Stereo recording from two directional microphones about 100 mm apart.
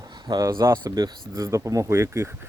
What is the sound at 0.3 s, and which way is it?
Speech, 40° right (ahead or behind).